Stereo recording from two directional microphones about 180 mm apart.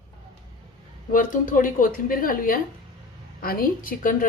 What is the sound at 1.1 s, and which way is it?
Speech, 50° left (ahead or behind).